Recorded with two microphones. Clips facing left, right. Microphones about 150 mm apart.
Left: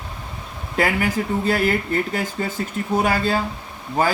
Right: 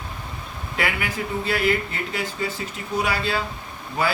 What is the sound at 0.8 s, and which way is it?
Speech, 40° left (ahead or behind).